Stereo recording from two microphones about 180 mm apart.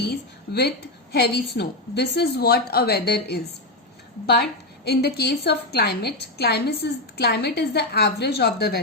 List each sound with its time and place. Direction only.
0.0 s a woman's voice: 65° left (ahead or behind)
4.9 s a woman's voice: 65° left (ahead or behind)